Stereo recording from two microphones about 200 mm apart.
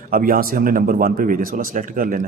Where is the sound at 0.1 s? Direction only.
45° right (ahead or behind).